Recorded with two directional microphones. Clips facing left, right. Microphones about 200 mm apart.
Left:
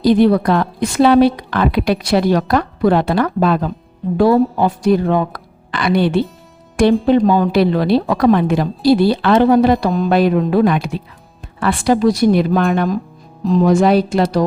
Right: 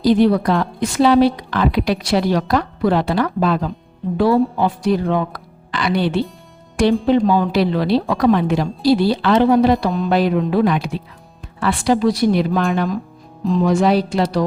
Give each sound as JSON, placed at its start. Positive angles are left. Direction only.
{"t": 0.0, "sound": "a woman's voice", "side_deg": 55}
{"t": 10.1, "sound": "a woman's voice", "side_deg": 55}